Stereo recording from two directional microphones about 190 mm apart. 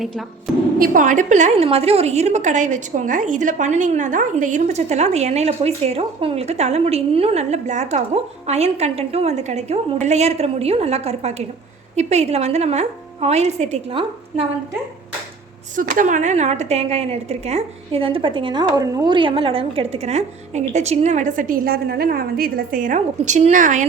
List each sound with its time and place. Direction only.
0.8 s a woman's voice: 45° right (ahead or behind)
15.7 s a woman's voice: 45° right (ahead or behind)